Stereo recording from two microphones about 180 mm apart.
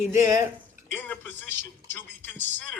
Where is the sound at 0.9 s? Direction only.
10° left (ahead or behind).